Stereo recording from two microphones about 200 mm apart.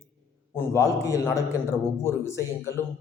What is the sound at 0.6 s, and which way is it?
A man's voice, 15° left (ahead or behind).